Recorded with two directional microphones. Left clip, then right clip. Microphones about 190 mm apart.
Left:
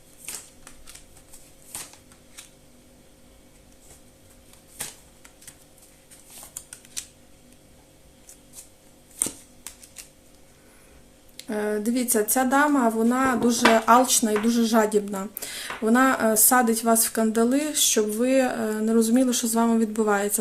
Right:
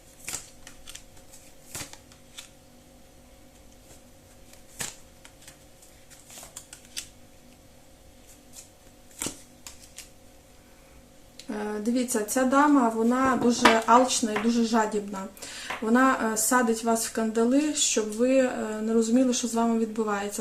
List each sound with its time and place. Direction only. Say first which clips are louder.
11.3 s speech: left 6 dB; 40° left (ahead or behind)